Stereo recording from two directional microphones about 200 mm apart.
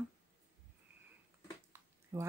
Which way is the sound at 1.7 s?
15° right (ahead or behind).